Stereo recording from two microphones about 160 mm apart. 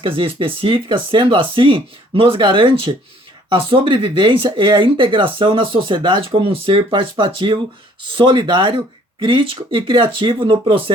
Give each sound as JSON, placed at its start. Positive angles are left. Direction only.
{"t": 0.0, "sound": "speech", "side_deg": -35}